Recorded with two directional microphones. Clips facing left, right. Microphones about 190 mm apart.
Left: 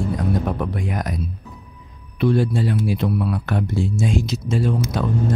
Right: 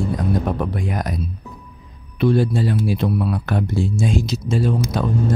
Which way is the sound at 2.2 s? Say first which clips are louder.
Right 1 dB; 35° right (ahead or behind).